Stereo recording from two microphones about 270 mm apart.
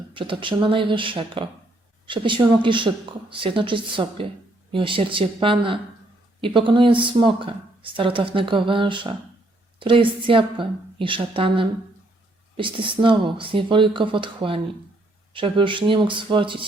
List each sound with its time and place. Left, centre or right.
0.1 s speech: centre